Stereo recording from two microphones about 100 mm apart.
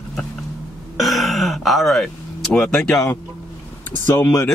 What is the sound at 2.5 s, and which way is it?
Speech, 5° left (ahead or behind).